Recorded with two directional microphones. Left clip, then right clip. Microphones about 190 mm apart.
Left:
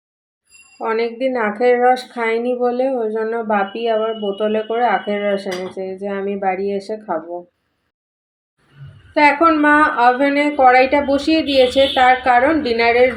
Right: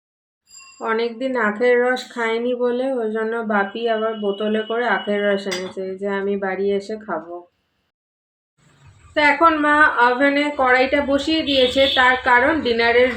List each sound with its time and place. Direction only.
0.8 s a woman's voice: 20° left (ahead or behind)
9.1 s a woman's voice: 15° left (ahead or behind)